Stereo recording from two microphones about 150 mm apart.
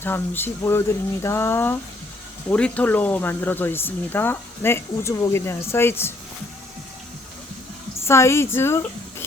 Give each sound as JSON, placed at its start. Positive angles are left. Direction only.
{"t": 0.0, "sound": "speech", "side_deg": 15}
{"t": 8.0, "sound": "speech", "side_deg": 15}